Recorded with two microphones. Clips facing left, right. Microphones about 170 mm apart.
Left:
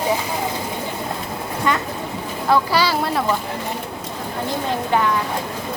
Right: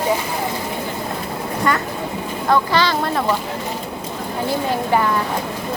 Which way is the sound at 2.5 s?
10° left (ahead or behind).